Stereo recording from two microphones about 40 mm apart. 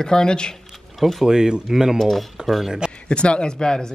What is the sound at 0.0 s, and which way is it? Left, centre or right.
Speech, centre.